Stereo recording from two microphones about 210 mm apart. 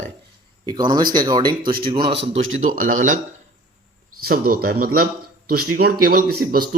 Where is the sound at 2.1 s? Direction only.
60° right (ahead or behind).